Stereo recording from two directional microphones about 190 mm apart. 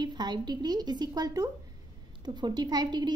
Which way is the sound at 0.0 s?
20° right (ahead or behind).